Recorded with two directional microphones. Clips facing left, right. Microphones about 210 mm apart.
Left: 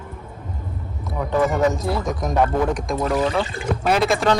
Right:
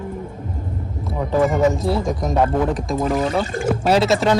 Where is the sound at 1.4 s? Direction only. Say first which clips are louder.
Right 3 dB; centre (ahead or behind).